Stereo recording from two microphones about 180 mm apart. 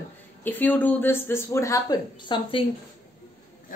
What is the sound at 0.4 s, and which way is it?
Speech, 10° left (ahead or behind).